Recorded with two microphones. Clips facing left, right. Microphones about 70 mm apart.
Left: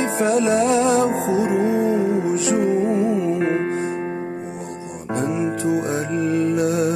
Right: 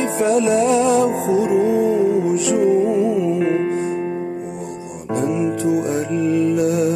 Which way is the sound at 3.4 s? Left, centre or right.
Left.